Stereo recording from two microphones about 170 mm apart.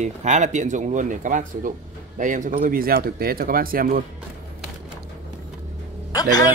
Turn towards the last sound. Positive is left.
turn(degrees=20)  # may be behind; listen again after turning